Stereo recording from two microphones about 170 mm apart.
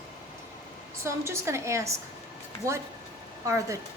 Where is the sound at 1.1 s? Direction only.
15° right (ahead or behind).